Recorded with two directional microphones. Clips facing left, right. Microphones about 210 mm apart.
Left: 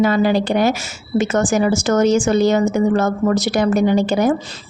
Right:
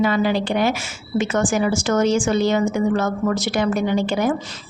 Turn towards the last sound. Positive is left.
turn(degrees=40)  # may be behind; listen again after turning